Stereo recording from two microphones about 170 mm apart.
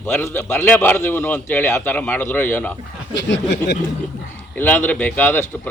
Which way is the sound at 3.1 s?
85° left.